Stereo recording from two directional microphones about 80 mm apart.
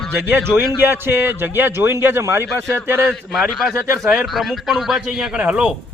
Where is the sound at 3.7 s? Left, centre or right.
Right.